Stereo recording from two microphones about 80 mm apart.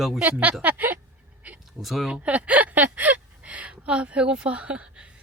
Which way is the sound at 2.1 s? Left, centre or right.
Centre.